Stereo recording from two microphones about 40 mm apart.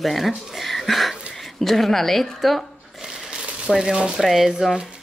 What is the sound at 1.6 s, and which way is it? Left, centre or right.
Speech, centre.